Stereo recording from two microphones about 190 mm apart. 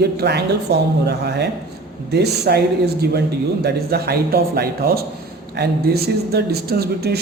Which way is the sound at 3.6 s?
55° right (ahead or behind).